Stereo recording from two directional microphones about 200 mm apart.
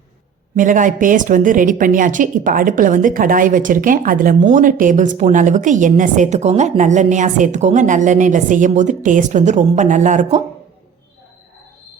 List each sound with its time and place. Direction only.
0.5 s a woman's voice: 40° right (ahead or behind)